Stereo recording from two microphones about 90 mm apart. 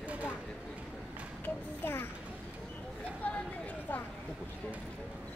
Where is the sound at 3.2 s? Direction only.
15° left (ahead or behind).